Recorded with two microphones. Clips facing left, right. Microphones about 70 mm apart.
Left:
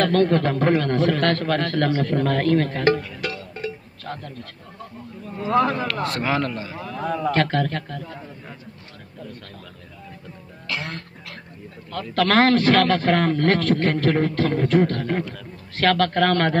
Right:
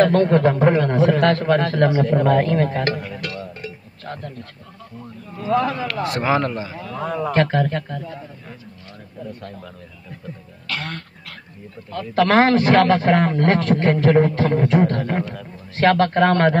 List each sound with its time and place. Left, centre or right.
0.0 s a man's voice: centre
3.2 s music: centre
3.6 s a sound: centre
5.6 s speech: left
5.9 s a man's voice: centre
10.7 s throat clearing: centre
11.9 s a man's voice: centre